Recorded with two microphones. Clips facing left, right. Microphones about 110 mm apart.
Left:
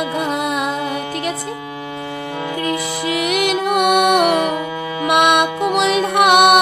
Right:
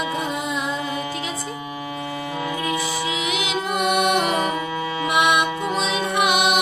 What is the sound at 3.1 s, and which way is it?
Music, 60° left (ahead or behind).